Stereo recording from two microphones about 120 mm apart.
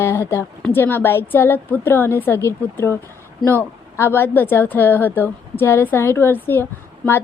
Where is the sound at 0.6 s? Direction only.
15° left (ahead or behind).